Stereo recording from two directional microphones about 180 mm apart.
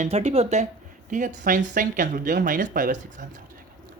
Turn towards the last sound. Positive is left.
turn(degrees=-45)  # may be behind; listen again after turning